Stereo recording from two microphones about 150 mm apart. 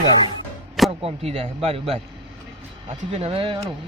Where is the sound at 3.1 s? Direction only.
40° right (ahead or behind).